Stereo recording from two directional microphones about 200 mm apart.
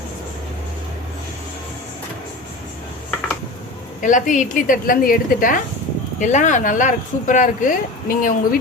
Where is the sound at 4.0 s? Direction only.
40° left (ahead or behind).